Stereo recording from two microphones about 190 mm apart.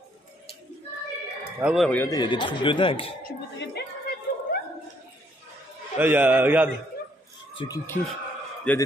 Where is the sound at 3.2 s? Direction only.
55° left (ahead or behind).